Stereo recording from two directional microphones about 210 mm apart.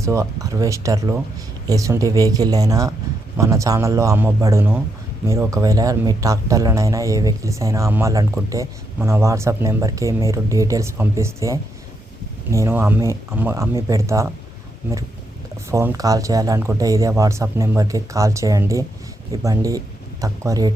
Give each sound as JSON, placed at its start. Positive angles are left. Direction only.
{"t": 0.0, "sound": "speech", "side_deg": -15}
{"t": 15.7, "sound": "speech", "side_deg": -15}